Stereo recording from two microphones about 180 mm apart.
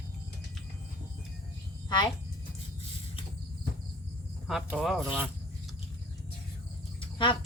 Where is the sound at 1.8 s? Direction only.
25° left (ahead or behind).